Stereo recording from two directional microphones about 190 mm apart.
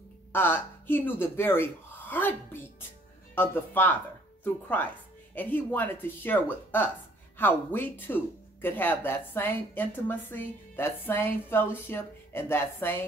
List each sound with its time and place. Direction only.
0.3 s speech: 10° left (ahead or behind)
3.3 s speech: 10° left (ahead or behind)